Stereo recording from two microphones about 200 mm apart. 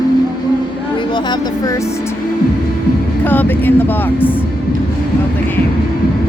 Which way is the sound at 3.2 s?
10° left (ahead or behind).